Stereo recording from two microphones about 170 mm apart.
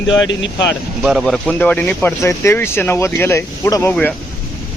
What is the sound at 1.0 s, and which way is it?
Speech, centre (ahead or behind).